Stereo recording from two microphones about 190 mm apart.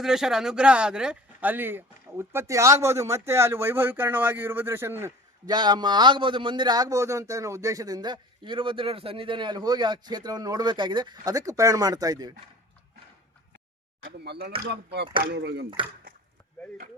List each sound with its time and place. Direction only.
0.0 s speech: centre (ahead or behind); by 12.3 s 20° right (ahead or behind)
14.3 s speech: 60° right (ahead or behind)